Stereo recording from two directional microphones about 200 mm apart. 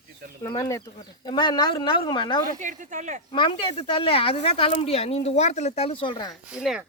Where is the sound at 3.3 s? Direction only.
25° left (ahead or behind).